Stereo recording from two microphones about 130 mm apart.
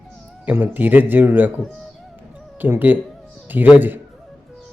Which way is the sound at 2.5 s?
15° right (ahead or behind).